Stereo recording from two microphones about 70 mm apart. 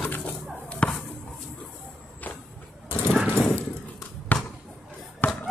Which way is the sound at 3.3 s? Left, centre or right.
Left.